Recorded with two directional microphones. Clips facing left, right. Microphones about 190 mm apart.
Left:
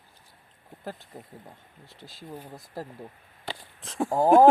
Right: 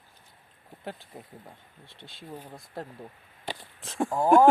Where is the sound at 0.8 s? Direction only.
Centre (ahead or behind).